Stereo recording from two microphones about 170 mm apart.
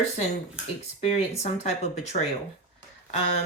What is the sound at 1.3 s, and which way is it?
Speech, 40° left (ahead or behind).